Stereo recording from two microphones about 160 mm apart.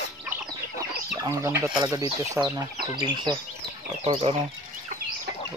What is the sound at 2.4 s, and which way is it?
Speech, 10° right (ahead or behind).